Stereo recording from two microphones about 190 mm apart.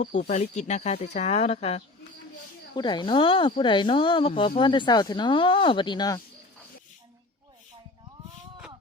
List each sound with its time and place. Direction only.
0.0 s speech: 40° left (ahead or behind)
2.7 s speech: 20° left (ahead or behind)